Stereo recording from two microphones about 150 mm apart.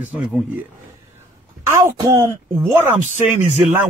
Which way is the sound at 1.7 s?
20° right (ahead or behind).